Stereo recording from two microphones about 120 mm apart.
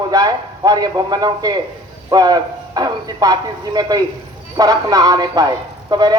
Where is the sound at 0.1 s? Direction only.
30° right (ahead or behind).